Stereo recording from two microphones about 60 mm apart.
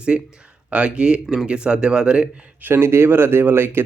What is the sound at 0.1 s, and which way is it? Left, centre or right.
A man's voice, right.